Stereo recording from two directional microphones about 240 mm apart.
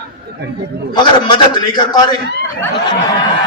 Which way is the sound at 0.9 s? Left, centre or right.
Centre.